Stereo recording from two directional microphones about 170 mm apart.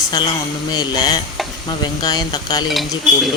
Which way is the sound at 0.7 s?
25° left (ahead or behind).